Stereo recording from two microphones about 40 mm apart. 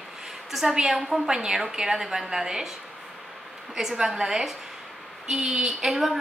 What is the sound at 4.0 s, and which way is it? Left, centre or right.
A woman's voice, centre.